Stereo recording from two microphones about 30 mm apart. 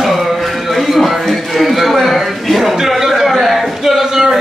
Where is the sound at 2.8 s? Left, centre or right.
Centre.